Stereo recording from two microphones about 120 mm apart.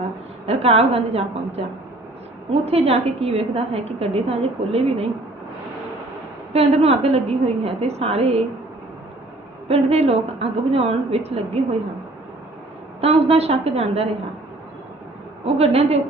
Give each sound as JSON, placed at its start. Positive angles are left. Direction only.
{"t": 0.4, "sound": "a woman's voice", "side_deg": -60}
{"t": 6.5, "sound": "a woman's voice", "side_deg": -60}
{"t": 9.6, "sound": "a woman's voice", "side_deg": -60}
{"t": 13.0, "sound": "a woman's voice", "side_deg": -60}
{"t": 15.4, "sound": "a woman's voice", "side_deg": -60}